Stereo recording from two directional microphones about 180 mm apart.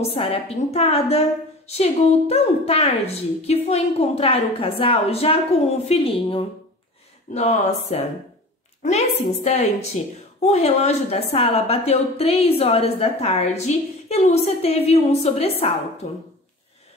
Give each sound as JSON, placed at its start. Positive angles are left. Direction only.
{"t": 0.1, "sound": "a woman's voice", "side_deg": 30}